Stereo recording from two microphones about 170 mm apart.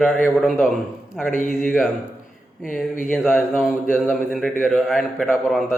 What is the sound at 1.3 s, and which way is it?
Mantra, 50° left (ahead or behind).